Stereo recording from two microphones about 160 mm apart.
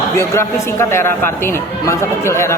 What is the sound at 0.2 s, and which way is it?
A man's voice, 15° left (ahead or behind).